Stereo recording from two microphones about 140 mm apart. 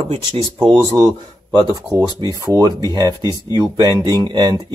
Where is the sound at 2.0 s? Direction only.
30° right (ahead or behind).